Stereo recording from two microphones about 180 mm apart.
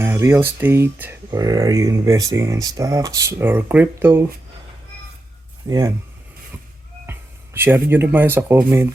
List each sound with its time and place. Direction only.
0.0 s speech: 15° right (ahead or behind)
5.6 s speech: 20° right (ahead or behind)
7.1 s speech: 10° right (ahead or behind)